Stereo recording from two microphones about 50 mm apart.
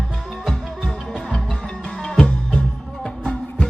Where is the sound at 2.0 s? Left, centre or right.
Centre.